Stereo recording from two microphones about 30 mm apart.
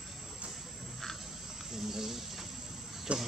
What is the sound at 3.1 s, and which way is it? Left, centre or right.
Speech, right.